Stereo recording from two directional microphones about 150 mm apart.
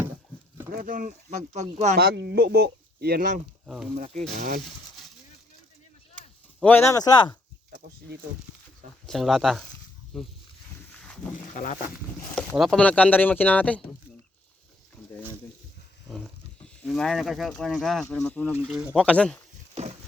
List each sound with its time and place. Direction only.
0.7 s speech: 70° right (ahead or behind); by 1.6 s 55° right (ahead or behind)
2.0 s speech: 90° right; by 3.4 s 75° right (ahead or behind)
3.9 s speech: 50° right (ahead or behind)
4.4 s speech: 65° right (ahead or behind)
6.6 s speech: 10° left (ahead or behind)
7.7 s a sound: 90° right
9.0 s speech: centre (ahead or behind)
11.5 s speech: 60° left (ahead or behind)
12.5 s speech: 5° left (ahead or behind)
16.0 s roaring cats: 5° left (ahead or behind)
16.6 s speech: 5° left (ahead or behind)
18.5 s speech: 5° right (ahead or behind)
18.9 s speech: 10° left (ahead or behind)
19.7 s a sound: 45° right (ahead or behind)